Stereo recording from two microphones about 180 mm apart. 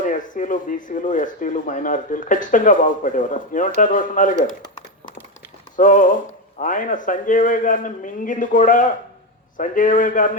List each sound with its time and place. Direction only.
0.0 s speech: 45° left (ahead or behind)
5.7 s speech: 45° left (ahead or behind)